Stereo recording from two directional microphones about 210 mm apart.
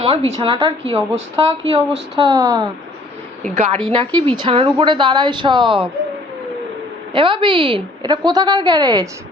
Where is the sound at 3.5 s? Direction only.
30° right (ahead or behind).